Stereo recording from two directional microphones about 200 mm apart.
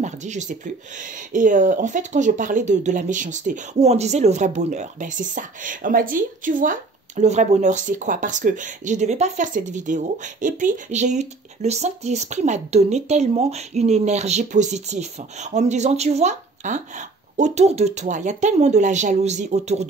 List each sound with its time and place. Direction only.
0.0 s speech: 35° right (ahead or behind)